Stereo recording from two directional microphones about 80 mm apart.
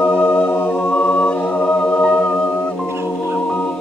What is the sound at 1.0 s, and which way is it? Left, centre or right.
A capella, centre.